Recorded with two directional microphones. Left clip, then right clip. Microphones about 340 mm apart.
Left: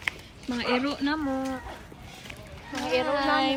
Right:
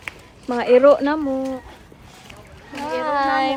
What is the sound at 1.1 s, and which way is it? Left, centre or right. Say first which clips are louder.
Speech: right 6 dB; left.